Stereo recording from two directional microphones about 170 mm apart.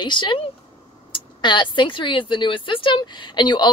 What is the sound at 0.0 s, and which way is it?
Speech, 25° left (ahead or behind).